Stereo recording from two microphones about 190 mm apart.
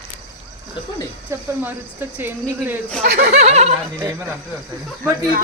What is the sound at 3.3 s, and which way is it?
Speech, 35° right (ahead or behind).